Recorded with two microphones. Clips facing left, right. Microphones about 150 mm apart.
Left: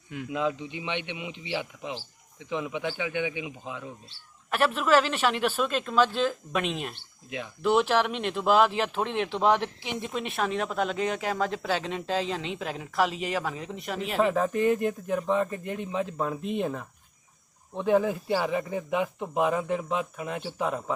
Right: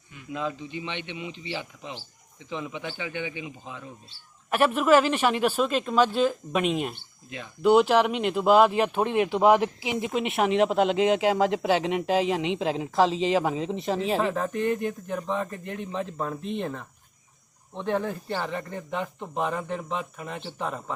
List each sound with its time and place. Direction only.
0.3 s speech: 15° left (ahead or behind)
4.5 s speech: 10° right (ahead or behind)
10.1 s speech: 20° right (ahead or behind)
14.2 s a man's voice: centre (ahead or behind)